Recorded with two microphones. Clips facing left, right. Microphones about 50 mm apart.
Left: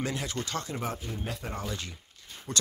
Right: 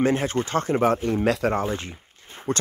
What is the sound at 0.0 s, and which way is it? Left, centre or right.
Speech, right.